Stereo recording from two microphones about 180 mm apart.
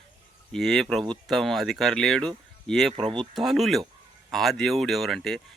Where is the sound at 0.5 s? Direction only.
Centre (ahead or behind).